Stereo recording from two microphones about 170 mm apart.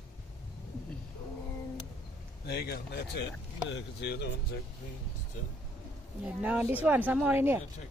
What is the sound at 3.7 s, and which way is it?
Speech, 85° left.